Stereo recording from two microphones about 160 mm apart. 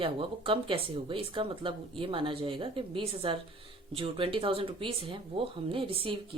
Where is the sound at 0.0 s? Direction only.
35° right (ahead or behind).